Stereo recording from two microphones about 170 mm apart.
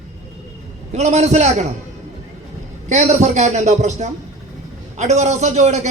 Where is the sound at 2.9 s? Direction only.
40° right (ahead or behind).